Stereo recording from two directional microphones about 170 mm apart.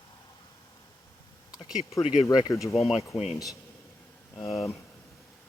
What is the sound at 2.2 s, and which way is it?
Speech, 20° left (ahead or behind).